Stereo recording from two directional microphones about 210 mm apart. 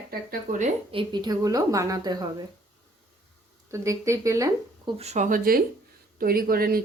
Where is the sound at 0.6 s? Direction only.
25° right (ahead or behind).